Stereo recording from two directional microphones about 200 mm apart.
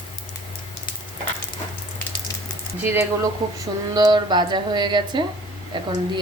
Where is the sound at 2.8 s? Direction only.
10° right (ahead or behind).